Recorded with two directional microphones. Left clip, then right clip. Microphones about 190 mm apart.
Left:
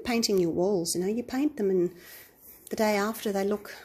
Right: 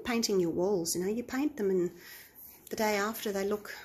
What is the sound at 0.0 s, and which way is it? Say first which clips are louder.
Speech: left 4 dB; 25° left (ahead or behind).